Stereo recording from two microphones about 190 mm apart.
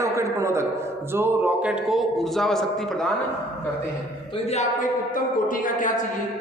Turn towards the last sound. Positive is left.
turn(degrees=45)  # may be behind; listen again after turning